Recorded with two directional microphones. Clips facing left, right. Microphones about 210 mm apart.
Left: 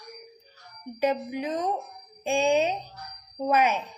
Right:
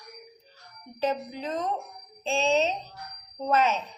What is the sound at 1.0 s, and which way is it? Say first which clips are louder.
Speech: left 3 dB; 15° left (ahead or behind).